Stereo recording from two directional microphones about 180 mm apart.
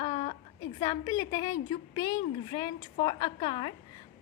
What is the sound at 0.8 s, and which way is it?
A woman's voice, 20° left (ahead or behind).